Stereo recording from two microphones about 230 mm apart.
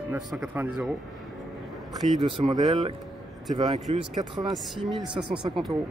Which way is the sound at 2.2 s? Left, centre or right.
Right.